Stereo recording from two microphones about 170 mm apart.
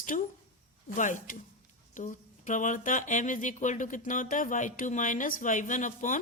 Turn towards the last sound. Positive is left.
turn(degrees=50)  # may be behind; listen again after turning